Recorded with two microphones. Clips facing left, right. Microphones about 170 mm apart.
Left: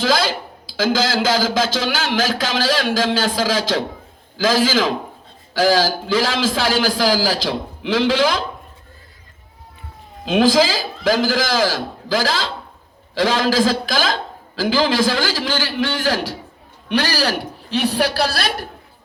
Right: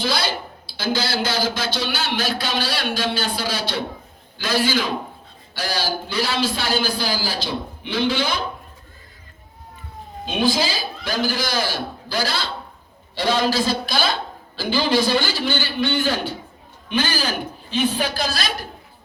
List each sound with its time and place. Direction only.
0.0 s a man's voice: 90° left
10.2 s a man's voice: 90° left
16.9 s a man's voice: 75° left (ahead or behind)